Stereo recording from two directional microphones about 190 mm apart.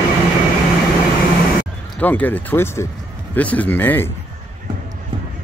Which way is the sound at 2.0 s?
10° left (ahead or behind).